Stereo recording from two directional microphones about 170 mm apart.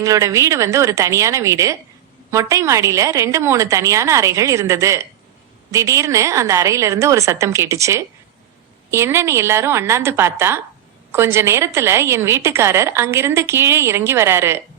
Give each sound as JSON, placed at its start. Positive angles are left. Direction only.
{"t": 0.0, "sound": "a woman's voice", "side_deg": -20}